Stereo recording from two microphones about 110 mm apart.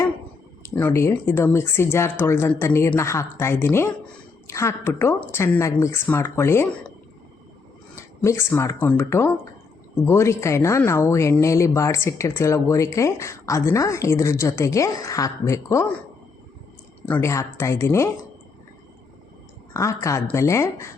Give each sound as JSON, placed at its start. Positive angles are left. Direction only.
{"t": 0.8, "sound": "a woman's voice", "side_deg": 20}
{"t": 8.2, "sound": "a woman's voice", "side_deg": 25}
{"t": 17.1, "sound": "a woman's voice", "side_deg": 25}
{"t": 19.7, "sound": "a woman's voice", "side_deg": 30}